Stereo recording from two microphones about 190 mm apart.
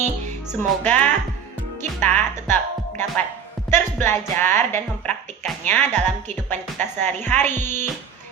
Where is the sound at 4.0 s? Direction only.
10° left (ahead or behind).